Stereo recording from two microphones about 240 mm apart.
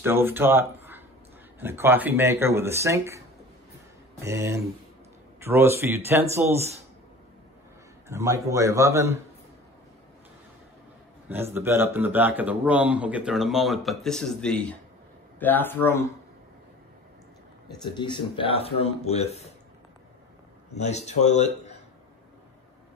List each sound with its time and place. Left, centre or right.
0.0 s speech: centre
8.1 s speech: centre
11.2 s speech: centre
17.8 s speech: centre
20.7 s speech: left